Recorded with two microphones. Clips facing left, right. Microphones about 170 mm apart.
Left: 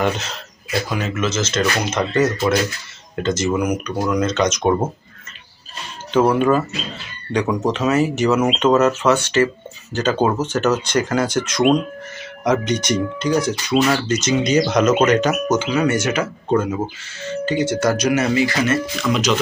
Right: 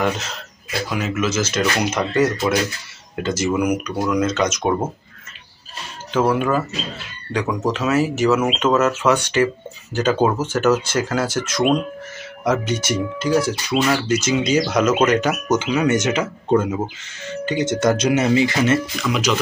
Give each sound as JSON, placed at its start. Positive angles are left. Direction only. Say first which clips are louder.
{"t": 0.8, "sound": "speech", "louder": "right 3 dB", "side_deg": -5}
{"t": 6.1, "sound": "speech", "louder": "left 3 dB", "side_deg": -5}
{"t": 18.9, "sound": "speech", "louder": "left 2 dB", "side_deg": -5}